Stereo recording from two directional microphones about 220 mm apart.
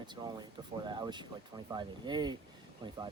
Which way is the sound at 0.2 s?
20° right (ahead or behind).